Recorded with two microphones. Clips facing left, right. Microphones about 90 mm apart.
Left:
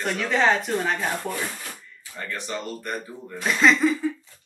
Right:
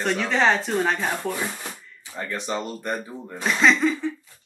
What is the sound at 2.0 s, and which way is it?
Speech, 20° right (ahead or behind).